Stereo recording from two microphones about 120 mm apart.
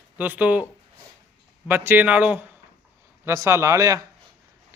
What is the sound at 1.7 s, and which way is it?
Speech, 15° right (ahead or behind).